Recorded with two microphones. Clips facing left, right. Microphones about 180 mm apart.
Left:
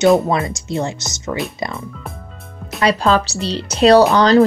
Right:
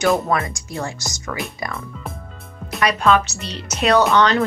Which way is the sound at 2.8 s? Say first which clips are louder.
Left 2 dB; 30° left (ahead or behind).